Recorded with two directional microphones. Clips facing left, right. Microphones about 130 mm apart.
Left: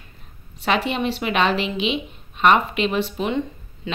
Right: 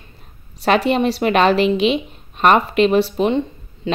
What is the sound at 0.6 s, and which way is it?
Speech, 40° right (ahead or behind).